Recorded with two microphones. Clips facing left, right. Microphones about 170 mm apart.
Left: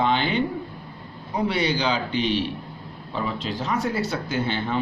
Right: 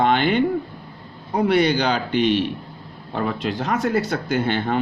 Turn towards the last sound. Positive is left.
turn(degrees=-55)  # may be behind; listen again after turning